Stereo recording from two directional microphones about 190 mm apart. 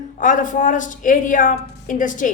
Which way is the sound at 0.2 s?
45° left (ahead or behind).